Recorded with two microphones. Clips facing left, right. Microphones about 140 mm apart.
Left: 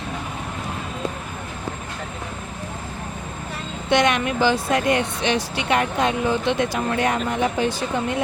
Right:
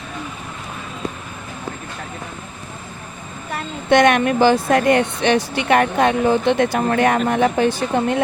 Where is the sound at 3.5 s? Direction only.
60° right (ahead or behind).